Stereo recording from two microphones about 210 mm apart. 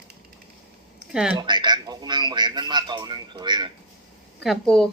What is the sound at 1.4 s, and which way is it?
A man's voice, 20° right (ahead or behind).